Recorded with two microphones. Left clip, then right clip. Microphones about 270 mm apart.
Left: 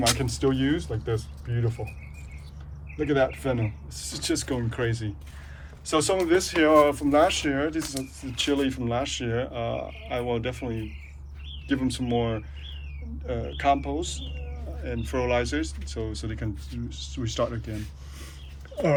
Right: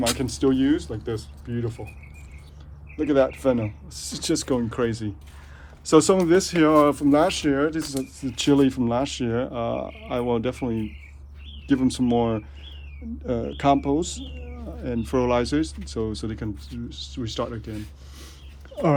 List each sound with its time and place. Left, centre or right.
0.1 s speech: centre
3.0 s speech: centre